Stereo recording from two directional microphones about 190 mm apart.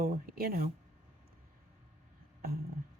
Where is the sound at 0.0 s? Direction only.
50° right (ahead or behind).